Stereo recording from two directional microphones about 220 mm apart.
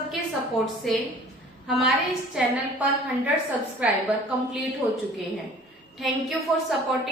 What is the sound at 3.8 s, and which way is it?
Speech, 5° right (ahead or behind).